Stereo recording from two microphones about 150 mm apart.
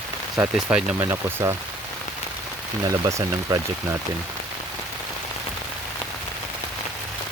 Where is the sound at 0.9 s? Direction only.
20° right (ahead or behind).